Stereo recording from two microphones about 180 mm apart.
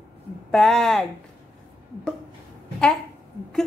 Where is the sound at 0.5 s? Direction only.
5° left (ahead or behind).